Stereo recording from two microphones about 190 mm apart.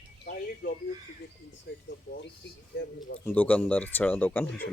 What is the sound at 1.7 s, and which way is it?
Speech, 70° left (ahead or behind).